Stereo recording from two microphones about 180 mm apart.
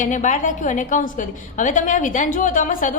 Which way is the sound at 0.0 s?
45° left (ahead or behind).